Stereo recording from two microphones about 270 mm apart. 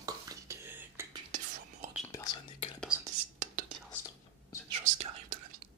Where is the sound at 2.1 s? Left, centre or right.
Centre.